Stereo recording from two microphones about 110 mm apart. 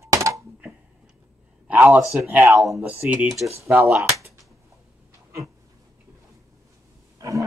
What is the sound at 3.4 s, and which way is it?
Speech, 25° right (ahead or behind).